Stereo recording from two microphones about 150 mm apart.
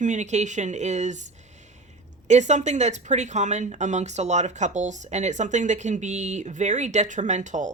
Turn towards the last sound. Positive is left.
turn(degrees=-55)  # may be behind; listen again after turning